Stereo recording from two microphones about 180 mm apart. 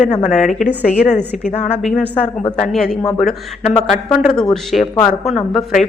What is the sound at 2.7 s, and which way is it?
Speech, centre (ahead or behind).